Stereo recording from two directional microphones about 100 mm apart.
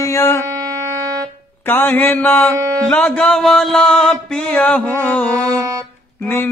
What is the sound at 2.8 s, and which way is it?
Music, 10° left (ahead or behind).